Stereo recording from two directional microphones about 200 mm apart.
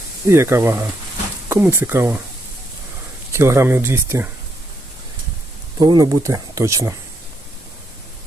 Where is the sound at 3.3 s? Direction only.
15° right (ahead or behind).